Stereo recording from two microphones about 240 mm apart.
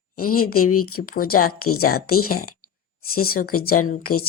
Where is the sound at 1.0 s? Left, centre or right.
Left.